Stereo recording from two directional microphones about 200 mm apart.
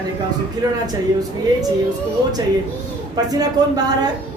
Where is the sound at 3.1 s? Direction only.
20° right (ahead or behind).